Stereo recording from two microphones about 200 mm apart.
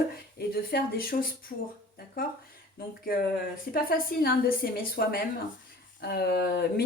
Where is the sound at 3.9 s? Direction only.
50° left (ahead or behind).